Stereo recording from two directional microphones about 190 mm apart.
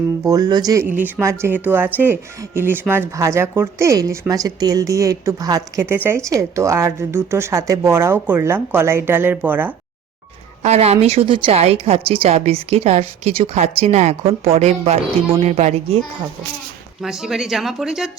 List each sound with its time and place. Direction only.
0.3 s speech: 20° right (ahead or behind)
10.6 s a woman's voice: 35° right (ahead or behind)
17.0 s speech: centre (ahead or behind)